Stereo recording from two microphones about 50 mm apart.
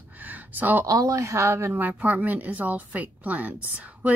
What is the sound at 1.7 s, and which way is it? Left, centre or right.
A woman's voice, right.